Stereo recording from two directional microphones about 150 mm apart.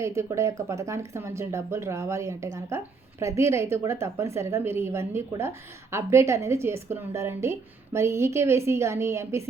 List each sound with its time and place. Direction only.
0.0 s a woman's voice: 20° right (ahead or behind)